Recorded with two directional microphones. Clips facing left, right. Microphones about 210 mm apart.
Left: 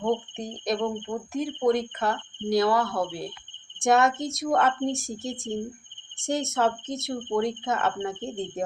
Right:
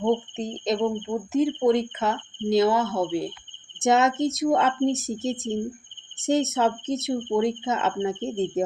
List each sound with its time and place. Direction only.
0.5 s speech: 20° right (ahead or behind)